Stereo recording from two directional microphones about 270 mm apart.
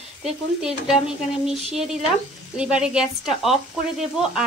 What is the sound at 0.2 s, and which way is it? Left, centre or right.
Speech, centre.